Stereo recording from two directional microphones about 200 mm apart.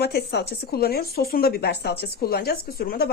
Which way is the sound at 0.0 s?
55° left (ahead or behind).